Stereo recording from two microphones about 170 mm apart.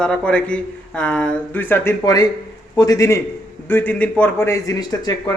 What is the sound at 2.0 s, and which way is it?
A man's voice, 20° left (ahead or behind).